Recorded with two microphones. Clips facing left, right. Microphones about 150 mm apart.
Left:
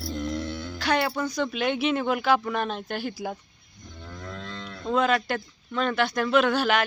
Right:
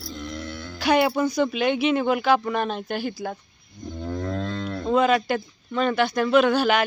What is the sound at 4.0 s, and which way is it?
Music, 45° right (ahead or behind).